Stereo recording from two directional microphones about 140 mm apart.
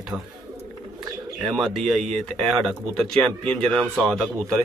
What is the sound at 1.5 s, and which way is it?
Speech, centre (ahead or behind).